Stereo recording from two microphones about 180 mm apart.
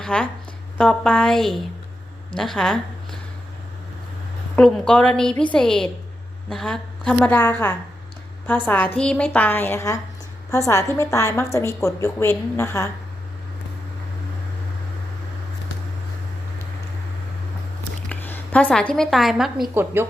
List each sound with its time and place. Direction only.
0.0 s a woman's voice: 5° left (ahead or behind)
4.5 s a woman's voice: 5° left (ahead or behind)
18.1 s speech: 10° left (ahead or behind)
19.7 s a woman's voice: 10° right (ahead or behind)